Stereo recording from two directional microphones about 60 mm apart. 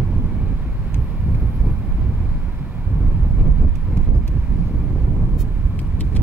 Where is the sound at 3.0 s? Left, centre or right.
Centre.